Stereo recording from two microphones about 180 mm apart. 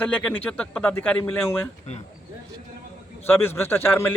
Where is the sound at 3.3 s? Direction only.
15° left (ahead or behind).